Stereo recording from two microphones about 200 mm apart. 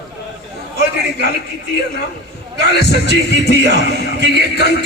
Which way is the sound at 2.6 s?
55° left (ahead or behind).